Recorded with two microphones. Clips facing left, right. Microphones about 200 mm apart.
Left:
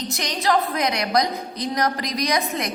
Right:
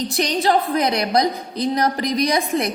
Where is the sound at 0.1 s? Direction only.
30° right (ahead or behind).